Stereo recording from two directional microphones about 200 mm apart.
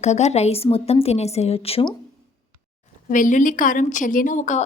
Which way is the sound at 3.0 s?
40° left (ahead or behind).